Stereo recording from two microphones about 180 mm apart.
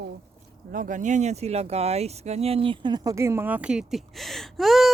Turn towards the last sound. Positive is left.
turn(degrees=0)  # may be behind; listen again after turning